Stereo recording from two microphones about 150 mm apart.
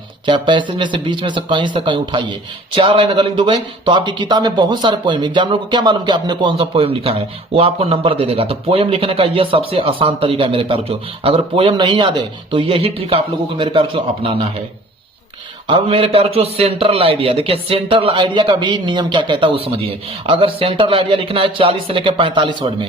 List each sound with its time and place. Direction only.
0.3 s speech: 30° right (ahead or behind)
15.6 s speech: 35° right (ahead or behind)